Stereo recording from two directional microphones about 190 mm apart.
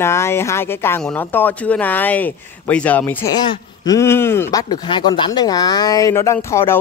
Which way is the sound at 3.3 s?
20° left (ahead or behind).